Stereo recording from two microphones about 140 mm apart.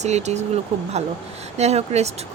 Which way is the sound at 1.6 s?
50° right (ahead or behind).